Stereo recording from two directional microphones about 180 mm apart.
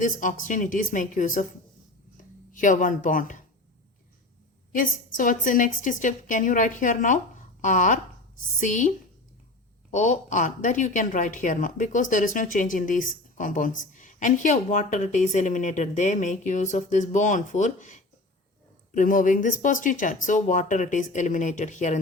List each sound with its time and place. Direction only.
0.0 s speech: 45° left (ahead or behind)
2.5 s speech: 45° left (ahead or behind)
4.7 s speech: 50° left (ahead or behind)
9.9 s speech: 45° left (ahead or behind)